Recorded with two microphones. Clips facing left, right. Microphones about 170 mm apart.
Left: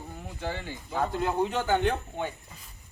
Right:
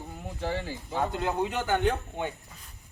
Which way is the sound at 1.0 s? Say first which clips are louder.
Left 2 dB; 15° right (ahead or behind).